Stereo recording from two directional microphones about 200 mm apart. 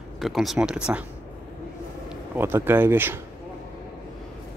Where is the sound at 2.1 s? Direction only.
10° right (ahead or behind).